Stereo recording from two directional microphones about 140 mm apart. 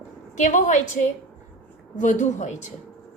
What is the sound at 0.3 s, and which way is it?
A woman's voice, 65° left (ahead or behind).